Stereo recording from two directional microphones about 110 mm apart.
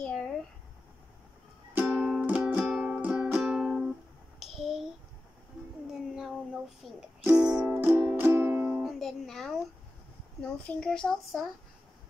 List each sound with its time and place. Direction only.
1.8 s music: 10° right (ahead or behind)
4.4 s a sound: centre (ahead or behind)
5.9 s a sound: 5° right (ahead or behind)
6.8 s music: 5° left (ahead or behind)
7.2 s music: 10° right (ahead or behind)
7.7 s music: 20° right (ahead or behind)
8.8 s music: centre (ahead or behind)
10.4 s a child's voice: 10° left (ahead or behind)